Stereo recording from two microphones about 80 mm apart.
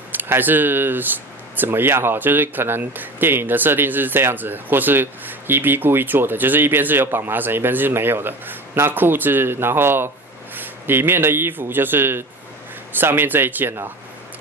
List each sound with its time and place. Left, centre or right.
0.1 s speech: right